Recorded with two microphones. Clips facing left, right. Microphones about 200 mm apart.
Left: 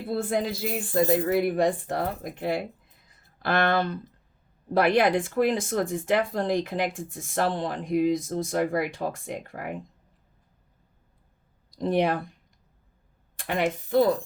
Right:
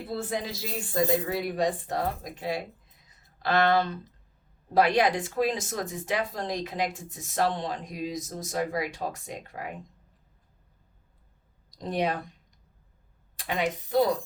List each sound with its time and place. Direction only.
0.1 s speech: 55° left (ahead or behind)
11.8 s speech: 55° left (ahead or behind)
13.3 s speech: 55° left (ahead or behind)